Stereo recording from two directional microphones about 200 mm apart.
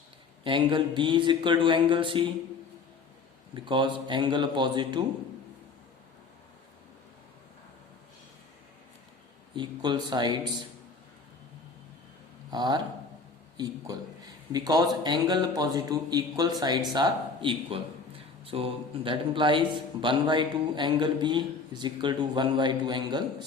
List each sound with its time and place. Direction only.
0.4 s a man's voice: 25° right (ahead or behind)
3.5 s a man's voice: 25° right (ahead or behind)
9.6 s a man's voice: 20° right (ahead or behind)
12.5 s a man's voice: 20° right (ahead or behind)